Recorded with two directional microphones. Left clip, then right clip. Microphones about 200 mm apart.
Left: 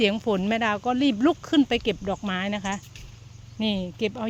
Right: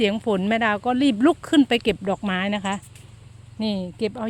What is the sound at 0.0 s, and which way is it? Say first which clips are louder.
Speech: right 1 dB; 15° right (ahead or behind).